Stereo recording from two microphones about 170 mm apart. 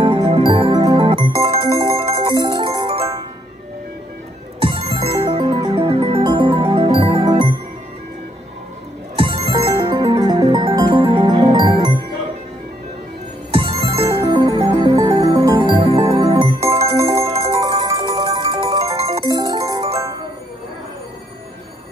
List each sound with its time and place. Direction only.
0.0 s music: 30° right (ahead or behind)
4.6 s music: 30° right (ahead or behind)
9.1 s music: 30° right (ahead or behind)
13.5 s music: 30° right (ahead or behind)
15.8 s music: 35° right (ahead or behind)
16.9 s glockenspiel: 15° right (ahead or behind)
17.6 s music: 20° right (ahead or behind)